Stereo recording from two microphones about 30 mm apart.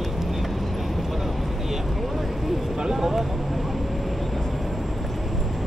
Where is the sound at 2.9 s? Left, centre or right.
Centre.